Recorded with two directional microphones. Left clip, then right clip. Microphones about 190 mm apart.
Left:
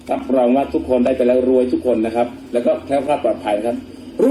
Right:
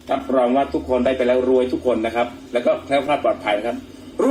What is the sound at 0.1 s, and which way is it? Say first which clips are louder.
A man's voice: left 2 dB; 35° left (ahead or behind).